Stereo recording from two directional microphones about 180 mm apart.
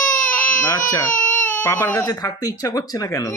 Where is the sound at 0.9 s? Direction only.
20° left (ahead or behind).